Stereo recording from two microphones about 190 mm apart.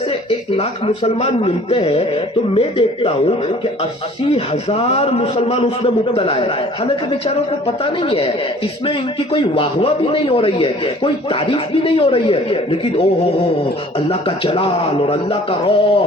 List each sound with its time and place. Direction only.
0.3 s a man's voice: 30° left (ahead or behind)
4.4 s a man's voice: 30° left (ahead or behind)
8.0 s speech: 30° left (ahead or behind)
14.1 s speech: 30° left (ahead or behind)